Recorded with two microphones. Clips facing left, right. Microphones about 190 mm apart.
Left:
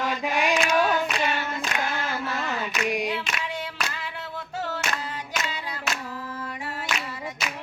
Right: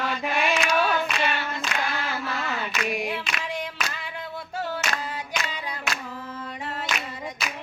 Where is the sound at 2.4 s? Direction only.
15° left (ahead or behind).